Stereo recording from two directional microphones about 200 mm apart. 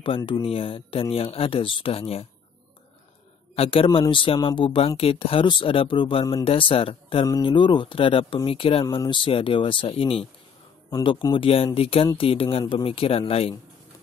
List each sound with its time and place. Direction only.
0.0 s speech: 25° left (ahead or behind)
3.5 s speech: 30° left (ahead or behind)